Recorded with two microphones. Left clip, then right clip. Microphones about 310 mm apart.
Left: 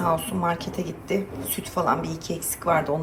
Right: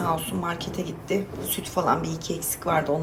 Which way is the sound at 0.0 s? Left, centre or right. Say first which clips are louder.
Left 3 dB; centre.